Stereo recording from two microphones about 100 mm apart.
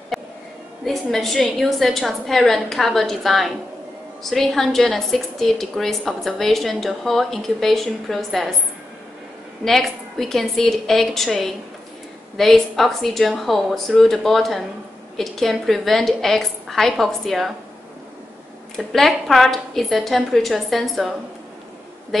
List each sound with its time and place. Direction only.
0.1 s a sound: centre (ahead or behind)
0.8 s a woman's voice: 5° left (ahead or behind)
9.7 s a woman's voice: 5° left (ahead or behind)
18.8 s a woman's voice: centre (ahead or behind)